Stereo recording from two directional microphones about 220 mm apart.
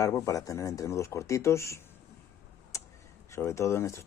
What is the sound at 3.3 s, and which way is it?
Speech, 15° left (ahead or behind).